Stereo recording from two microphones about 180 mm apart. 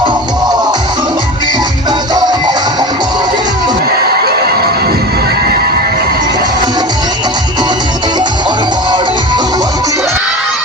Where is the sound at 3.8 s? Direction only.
60° right (ahead or behind).